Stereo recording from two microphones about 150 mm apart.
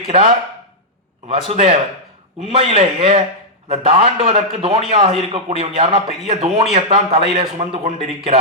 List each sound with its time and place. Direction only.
1.5 s a man's voice: 45° right (ahead or behind)